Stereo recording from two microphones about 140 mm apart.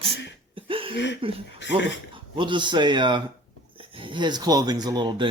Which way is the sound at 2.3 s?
35° right (ahead or behind).